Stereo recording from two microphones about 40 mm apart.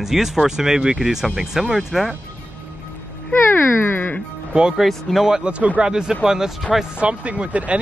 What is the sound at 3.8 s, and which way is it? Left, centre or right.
Music, left.